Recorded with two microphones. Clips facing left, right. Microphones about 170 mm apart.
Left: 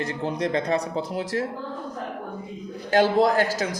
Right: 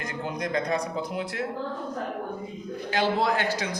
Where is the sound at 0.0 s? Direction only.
30° left (ahead or behind).